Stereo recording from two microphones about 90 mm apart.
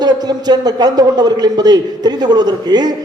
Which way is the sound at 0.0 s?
50° right (ahead or behind).